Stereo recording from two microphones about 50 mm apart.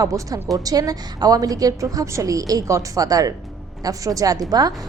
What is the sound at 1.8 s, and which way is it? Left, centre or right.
Speech, right.